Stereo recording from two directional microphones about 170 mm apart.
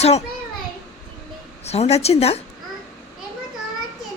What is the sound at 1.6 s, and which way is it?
Speech, 40° left (ahead or behind).